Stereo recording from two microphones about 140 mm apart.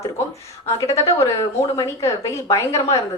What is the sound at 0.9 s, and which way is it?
A woman's voice, 20° left (ahead or behind).